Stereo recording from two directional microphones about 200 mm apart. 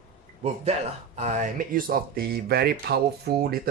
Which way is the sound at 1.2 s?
35° right (ahead or behind).